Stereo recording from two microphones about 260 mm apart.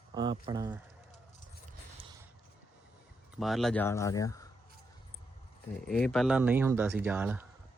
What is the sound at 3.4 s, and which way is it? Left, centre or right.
Speech, centre.